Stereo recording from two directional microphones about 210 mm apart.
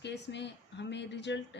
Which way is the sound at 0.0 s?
55° left (ahead or behind).